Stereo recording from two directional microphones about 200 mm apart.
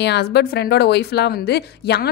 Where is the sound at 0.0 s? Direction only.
55° left (ahead or behind).